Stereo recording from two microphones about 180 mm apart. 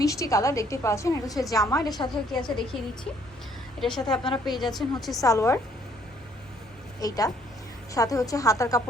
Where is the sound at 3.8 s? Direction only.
5° left (ahead or behind).